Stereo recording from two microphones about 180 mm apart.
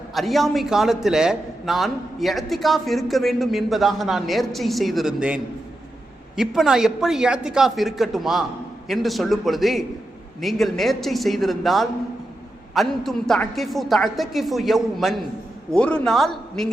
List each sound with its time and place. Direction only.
0.1 s a man's voice: centre (ahead or behind)